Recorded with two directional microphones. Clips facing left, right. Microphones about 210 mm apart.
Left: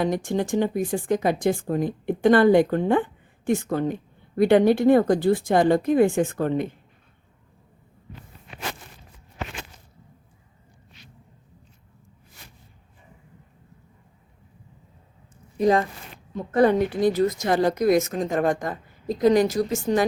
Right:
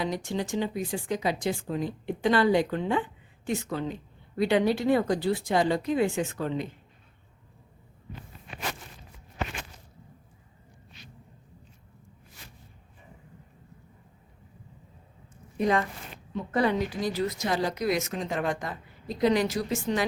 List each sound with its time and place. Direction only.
0.0 s speech: 50° left (ahead or behind)
15.6 s speech: 35° left (ahead or behind)
16.6 s speech: 50° left (ahead or behind)